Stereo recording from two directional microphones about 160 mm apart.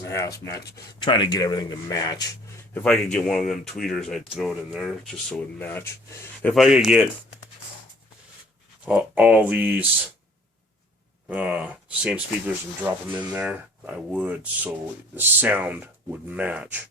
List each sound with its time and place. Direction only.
1.0 s speech: 30° left (ahead or behind)
2.7 s speech: 5° left (ahead or behind)
5.3 s speech: 10° left (ahead or behind)
6.5 s speech: centre (ahead or behind)
8.8 s speech: 10° right (ahead or behind)
11.3 s speech: 10° right (ahead or behind)